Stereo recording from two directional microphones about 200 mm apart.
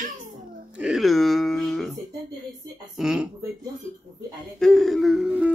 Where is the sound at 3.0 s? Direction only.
5° right (ahead or behind).